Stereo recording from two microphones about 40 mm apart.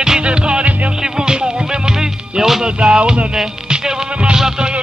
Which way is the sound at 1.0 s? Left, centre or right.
Centre.